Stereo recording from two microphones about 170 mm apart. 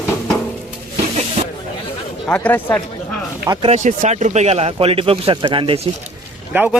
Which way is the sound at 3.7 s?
45° right (ahead or behind).